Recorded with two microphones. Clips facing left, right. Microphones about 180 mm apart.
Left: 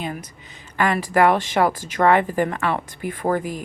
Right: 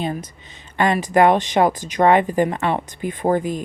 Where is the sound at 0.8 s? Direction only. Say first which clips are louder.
Right 2 dB; 20° right (ahead or behind).